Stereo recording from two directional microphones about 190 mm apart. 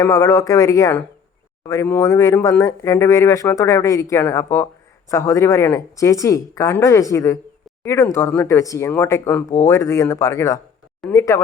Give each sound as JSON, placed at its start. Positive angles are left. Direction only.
{"t": 0.0, "sound": "speech", "side_deg": 15}